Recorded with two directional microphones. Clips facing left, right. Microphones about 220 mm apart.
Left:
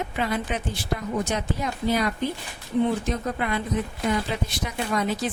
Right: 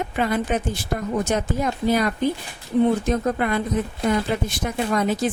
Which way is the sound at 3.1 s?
50° right (ahead or behind).